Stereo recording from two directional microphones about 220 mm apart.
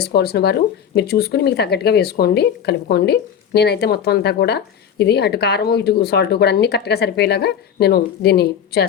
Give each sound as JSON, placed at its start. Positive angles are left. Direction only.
{"t": 0.0, "sound": "speech", "side_deg": 45}